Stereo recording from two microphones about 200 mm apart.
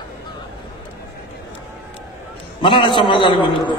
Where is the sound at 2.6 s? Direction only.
25° left (ahead or behind).